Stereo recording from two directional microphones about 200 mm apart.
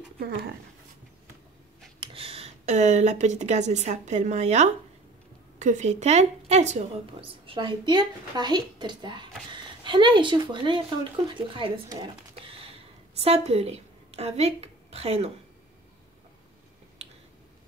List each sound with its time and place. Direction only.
2.0 s a woman's voice: 30° right (ahead or behind)